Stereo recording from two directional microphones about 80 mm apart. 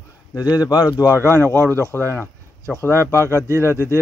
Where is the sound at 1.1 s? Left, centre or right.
Right.